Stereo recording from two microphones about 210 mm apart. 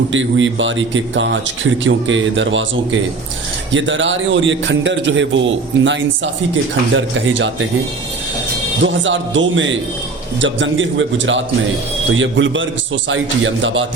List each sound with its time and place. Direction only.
0.1 s a man's voice: 65° right (ahead or behind)
8.8 s a man's voice: 65° right (ahead or behind)